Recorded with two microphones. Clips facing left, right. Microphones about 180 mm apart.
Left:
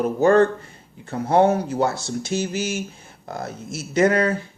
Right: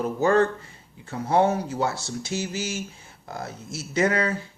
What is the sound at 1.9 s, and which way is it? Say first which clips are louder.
Speech: left 5 dB; 20° left (ahead or behind).